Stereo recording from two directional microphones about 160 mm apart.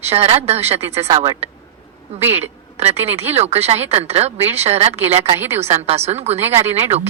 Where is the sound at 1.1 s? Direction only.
25° right (ahead or behind).